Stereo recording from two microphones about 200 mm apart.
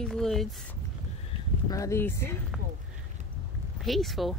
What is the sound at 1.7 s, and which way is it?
Speech, 15° left (ahead or behind).